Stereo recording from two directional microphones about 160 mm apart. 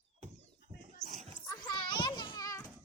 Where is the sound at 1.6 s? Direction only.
30° left (ahead or behind).